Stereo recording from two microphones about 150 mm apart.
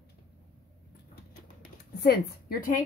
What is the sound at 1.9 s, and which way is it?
Speech, 90° left.